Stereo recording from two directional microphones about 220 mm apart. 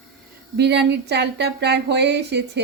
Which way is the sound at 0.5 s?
50° right (ahead or behind).